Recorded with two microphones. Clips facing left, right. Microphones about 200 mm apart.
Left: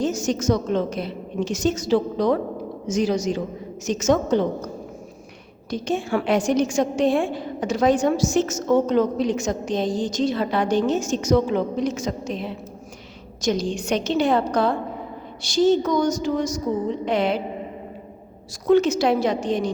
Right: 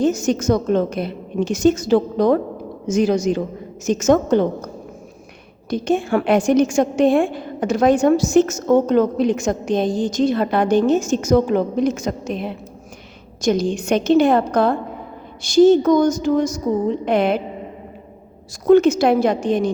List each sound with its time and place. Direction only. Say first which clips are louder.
0.0 s a woman's voice: right 5 dB; 55° right (ahead or behind)
5.7 s a woman's voice: right 5 dB; 55° right (ahead or behind)
18.7 s a woman's voice: right 5 dB; 50° right (ahead or behind)